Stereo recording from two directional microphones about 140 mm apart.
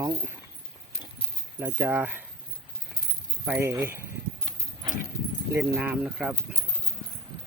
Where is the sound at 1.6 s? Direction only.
15° right (ahead or behind).